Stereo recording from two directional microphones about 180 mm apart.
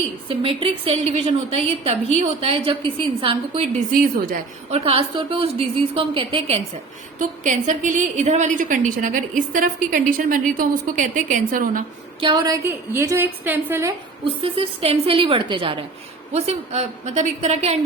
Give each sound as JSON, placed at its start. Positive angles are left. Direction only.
{"t": 0.3, "sound": "a woman's voice", "side_deg": -30}
{"t": 4.7, "sound": "a woman's voice", "side_deg": -35}
{"t": 7.2, "sound": "a woman's voice", "side_deg": -45}
{"t": 12.2, "sound": "a woman's voice", "side_deg": -25}
{"t": 12.6, "sound": "a woman's voice", "side_deg": -15}
{"t": 14.4, "sound": "a woman's voice", "side_deg": -30}